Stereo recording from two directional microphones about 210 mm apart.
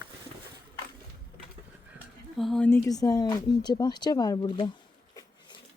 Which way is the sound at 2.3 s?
Centre (ahead or behind).